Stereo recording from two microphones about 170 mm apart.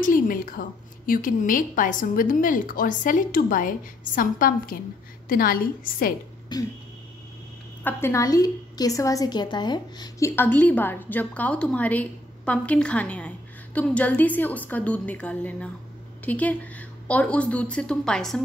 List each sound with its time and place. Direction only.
0.0 s a woman's voice: 55° left (ahead or behind)
6.5 s speech: 25° left (ahead or behind)
7.8 s a woman's voice: 15° left (ahead or behind)